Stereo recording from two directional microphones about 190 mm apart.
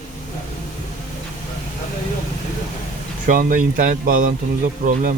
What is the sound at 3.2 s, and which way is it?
Speech, 45° right (ahead or behind).